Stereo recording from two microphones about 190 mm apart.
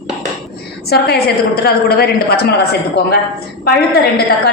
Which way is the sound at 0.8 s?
55° left (ahead or behind).